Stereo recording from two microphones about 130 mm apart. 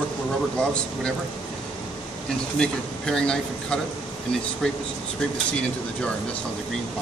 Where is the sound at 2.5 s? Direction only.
5° left (ahead or behind).